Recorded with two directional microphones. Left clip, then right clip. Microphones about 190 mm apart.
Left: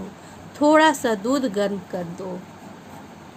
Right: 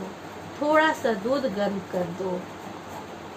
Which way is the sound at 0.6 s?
70° left (ahead or behind).